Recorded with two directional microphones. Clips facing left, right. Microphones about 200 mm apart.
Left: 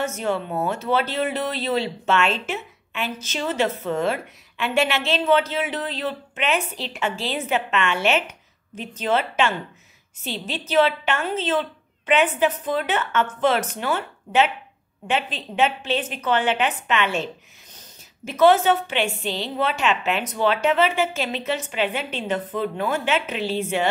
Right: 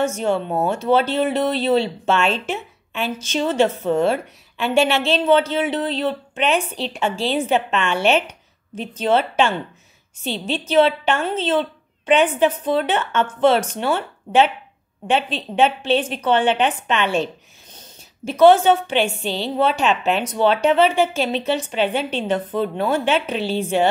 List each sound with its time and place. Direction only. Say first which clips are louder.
0.0 s a woman's voice: right 4 dB; 30° right (ahead or behind)